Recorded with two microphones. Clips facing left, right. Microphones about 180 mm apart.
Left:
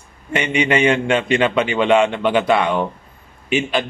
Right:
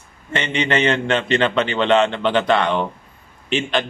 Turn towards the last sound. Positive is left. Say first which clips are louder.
# left 2 dB
turn(degrees=10)  # may be behind; listen again after turning